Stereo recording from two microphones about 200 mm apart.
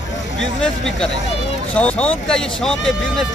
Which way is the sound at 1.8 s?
5° left (ahead or behind).